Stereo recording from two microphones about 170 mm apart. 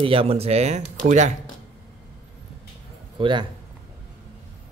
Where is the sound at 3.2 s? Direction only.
30° right (ahead or behind).